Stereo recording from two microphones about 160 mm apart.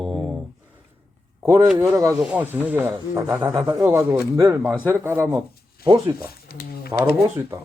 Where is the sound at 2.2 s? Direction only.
10° right (ahead or behind).